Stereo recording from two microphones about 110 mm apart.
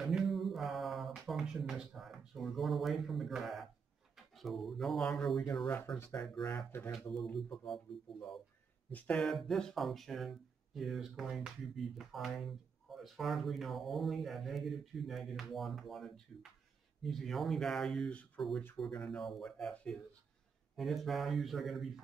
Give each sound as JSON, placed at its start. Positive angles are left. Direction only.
{"t": 0.0, "sound": "mantra", "side_deg": 0}
{"t": 4.4, "sound": "speech", "side_deg": 0}
{"t": 6.3, "sound": "speech", "side_deg": 35}
{"t": 7.0, "sound": "speech", "side_deg": 5}
{"t": 8.9, "sound": "speech", "side_deg": 15}
{"t": 9.2, "sound": "speech", "side_deg": 5}